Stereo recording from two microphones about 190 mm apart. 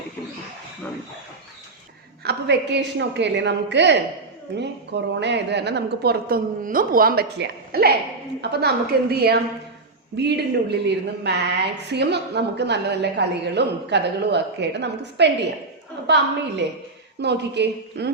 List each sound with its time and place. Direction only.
2.2 s a woman's voice: 65° right (ahead or behind)